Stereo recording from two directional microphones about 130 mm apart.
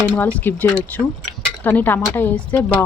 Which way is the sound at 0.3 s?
10° left (ahead or behind).